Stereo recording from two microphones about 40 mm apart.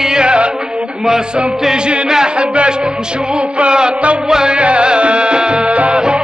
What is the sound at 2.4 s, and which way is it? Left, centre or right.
Music, right.